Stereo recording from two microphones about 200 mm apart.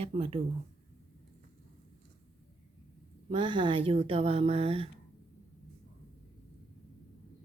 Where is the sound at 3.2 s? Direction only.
25° right (ahead or behind).